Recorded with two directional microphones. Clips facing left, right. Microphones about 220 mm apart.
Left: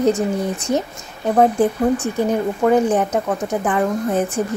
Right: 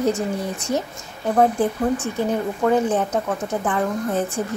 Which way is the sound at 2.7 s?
15° left (ahead or behind).